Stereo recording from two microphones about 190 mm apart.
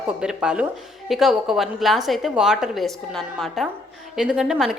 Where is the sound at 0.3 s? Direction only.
10° right (ahead or behind).